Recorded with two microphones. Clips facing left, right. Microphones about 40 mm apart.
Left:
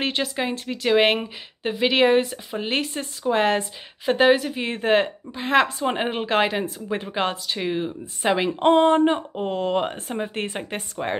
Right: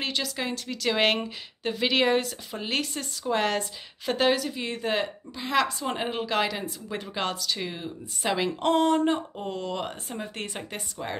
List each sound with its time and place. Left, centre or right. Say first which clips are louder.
0.0 s speech: left 5 dB; left